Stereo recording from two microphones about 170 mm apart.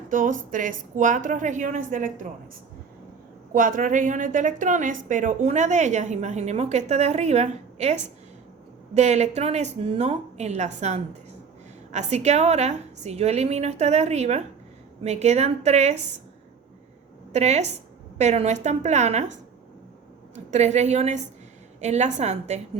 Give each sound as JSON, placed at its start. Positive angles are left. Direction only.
{"t": 0.1, "sound": "a woman's voice", "side_deg": -50}
{"t": 3.5, "sound": "a woman's voice", "side_deg": -55}
{"t": 17.3, "sound": "a woman's voice", "side_deg": -40}
{"t": 20.3, "sound": "a woman's voice", "side_deg": -40}